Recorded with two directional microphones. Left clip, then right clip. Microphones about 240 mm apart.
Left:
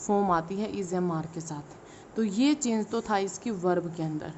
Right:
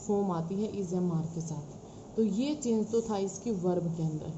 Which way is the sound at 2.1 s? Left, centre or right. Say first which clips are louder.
Left 4 dB; left.